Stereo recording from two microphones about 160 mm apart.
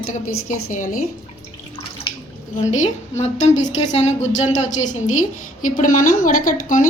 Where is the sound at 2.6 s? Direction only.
50° left (ahead or behind).